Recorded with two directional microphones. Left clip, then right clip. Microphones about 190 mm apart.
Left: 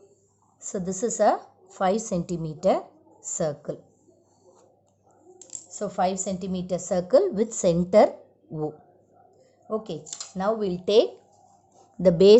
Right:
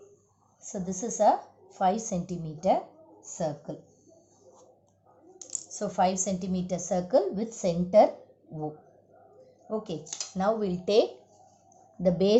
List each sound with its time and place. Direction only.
0.6 s a woman's voice: 45° left (ahead or behind)
5.8 s a woman's voice: 20° left (ahead or behind)
7.1 s a woman's voice: 45° left (ahead or behind)
9.6 s speech: 20° left (ahead or behind)
12.0 s a woman's voice: 50° left (ahead or behind)